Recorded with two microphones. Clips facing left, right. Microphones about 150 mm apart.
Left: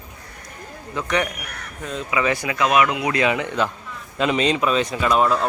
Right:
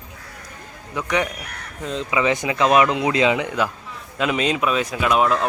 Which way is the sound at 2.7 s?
30° right (ahead or behind).